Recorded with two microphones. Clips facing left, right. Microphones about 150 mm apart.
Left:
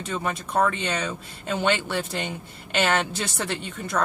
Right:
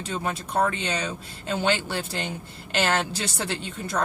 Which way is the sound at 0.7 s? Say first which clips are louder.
Left 1 dB; 60° left (ahead or behind).